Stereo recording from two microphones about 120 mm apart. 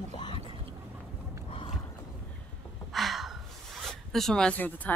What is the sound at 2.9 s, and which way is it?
Gasp, centre (ahead or behind).